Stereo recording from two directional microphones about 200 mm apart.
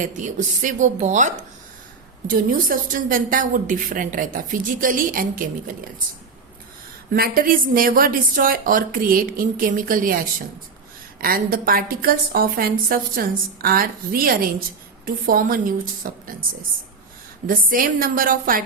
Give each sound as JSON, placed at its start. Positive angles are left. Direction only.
{"t": 0.0, "sound": "a woman's voice", "side_deg": -40}
{"t": 7.1, "sound": "a woman's voice", "side_deg": -45}
{"t": 17.4, "sound": "a woman's voice", "side_deg": -45}